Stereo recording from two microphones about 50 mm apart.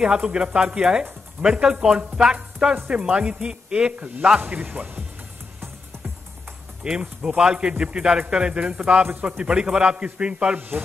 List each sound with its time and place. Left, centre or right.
0.0 s speech: centre
4.4 s speech: right
6.8 s speech: centre